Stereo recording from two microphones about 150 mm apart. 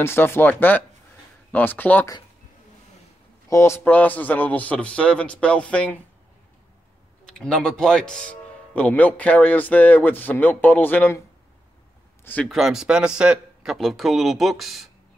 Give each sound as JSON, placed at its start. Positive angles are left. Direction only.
{"t": 0.0, "sound": "speech", "side_deg": 15}
{"t": 3.4, "sound": "speech", "side_deg": 20}
{"t": 7.2, "sound": "speech", "side_deg": 5}
{"t": 12.4, "sound": "a man's voice", "side_deg": 0}